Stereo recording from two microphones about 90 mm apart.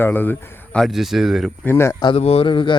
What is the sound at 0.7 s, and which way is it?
Speech, centre (ahead or behind).